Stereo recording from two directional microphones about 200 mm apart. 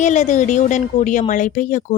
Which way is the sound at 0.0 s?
35° left (ahead or behind).